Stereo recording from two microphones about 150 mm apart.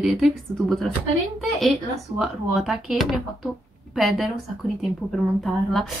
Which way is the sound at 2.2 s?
5° right (ahead or behind).